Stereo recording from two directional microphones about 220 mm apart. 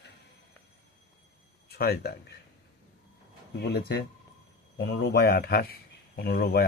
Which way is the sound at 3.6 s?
45° left (ahead or behind).